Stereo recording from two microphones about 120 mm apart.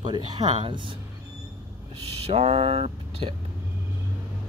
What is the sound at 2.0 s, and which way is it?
Speech, 55° right (ahead or behind).